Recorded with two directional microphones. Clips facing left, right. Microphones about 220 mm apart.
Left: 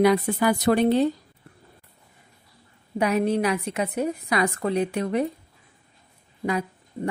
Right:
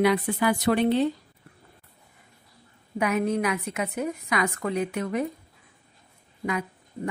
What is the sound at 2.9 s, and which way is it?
A woman's voice, 35° left (ahead or behind).